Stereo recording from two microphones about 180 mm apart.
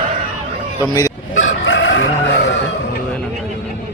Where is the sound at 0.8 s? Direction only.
20° left (ahead or behind).